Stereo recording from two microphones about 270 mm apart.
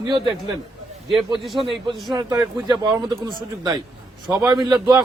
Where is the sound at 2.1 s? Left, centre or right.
Centre.